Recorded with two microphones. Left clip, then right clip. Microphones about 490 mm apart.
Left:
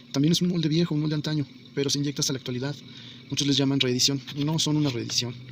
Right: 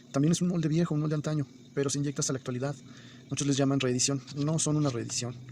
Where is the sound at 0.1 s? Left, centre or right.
Right.